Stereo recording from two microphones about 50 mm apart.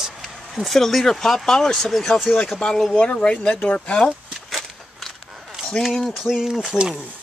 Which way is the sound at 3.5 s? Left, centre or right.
Left.